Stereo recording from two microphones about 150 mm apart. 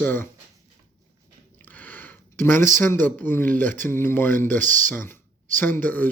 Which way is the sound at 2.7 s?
15° left (ahead or behind).